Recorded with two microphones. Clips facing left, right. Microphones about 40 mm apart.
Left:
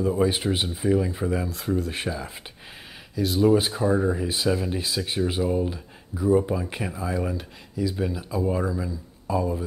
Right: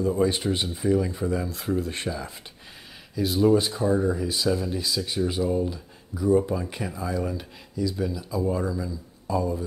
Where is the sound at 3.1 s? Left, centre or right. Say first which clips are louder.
Left 1 dB; centre.